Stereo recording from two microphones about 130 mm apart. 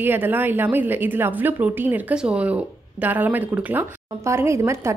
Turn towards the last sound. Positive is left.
turn(degrees=-20)  # may be behind; listen again after turning